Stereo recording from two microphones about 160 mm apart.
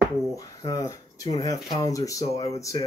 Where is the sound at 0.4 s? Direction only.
25° left (ahead or behind).